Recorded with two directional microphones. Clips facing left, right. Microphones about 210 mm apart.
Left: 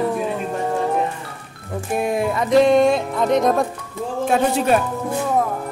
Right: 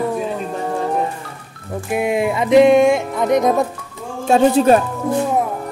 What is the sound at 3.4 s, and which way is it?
Speech, 5° right (ahead or behind).